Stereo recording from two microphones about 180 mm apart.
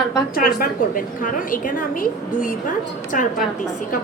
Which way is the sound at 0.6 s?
50° left (ahead or behind).